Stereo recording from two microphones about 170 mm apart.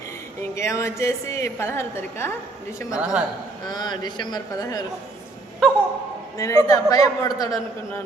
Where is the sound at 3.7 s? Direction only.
25° left (ahead or behind).